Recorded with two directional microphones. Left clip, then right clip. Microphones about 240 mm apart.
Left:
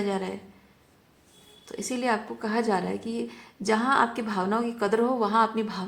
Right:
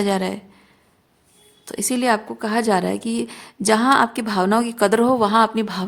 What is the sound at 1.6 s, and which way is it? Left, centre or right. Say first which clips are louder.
A woman's voice: right 8 dB; right.